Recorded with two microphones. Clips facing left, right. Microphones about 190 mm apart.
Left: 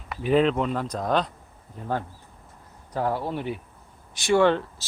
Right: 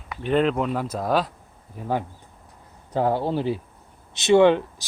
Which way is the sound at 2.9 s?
25° right (ahead or behind).